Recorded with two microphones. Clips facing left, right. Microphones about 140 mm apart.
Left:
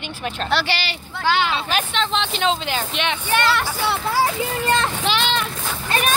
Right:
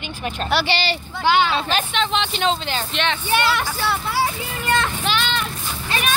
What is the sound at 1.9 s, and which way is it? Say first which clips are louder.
Speech: right 1 dB; 5° right (ahead or behind).